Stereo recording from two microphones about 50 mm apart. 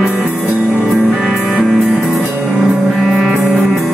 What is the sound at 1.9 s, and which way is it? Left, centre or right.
Music, centre.